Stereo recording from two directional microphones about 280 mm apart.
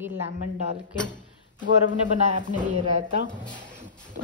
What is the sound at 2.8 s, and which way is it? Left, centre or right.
Speech, right.